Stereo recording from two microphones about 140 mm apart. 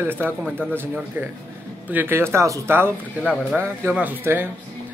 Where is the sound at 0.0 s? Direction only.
15° right (ahead or behind).